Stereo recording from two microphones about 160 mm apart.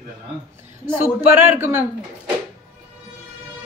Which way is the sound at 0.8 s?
15° right (ahead or behind).